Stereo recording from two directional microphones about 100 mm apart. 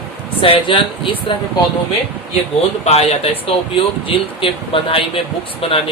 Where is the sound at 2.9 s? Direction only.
90° left.